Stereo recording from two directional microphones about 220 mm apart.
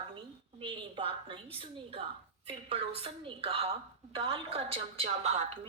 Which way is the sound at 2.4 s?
25° right (ahead or behind).